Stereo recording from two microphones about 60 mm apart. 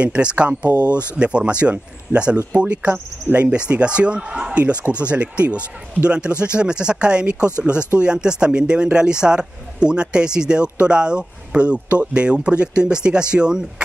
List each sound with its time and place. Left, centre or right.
0.0 s a man's voice: centre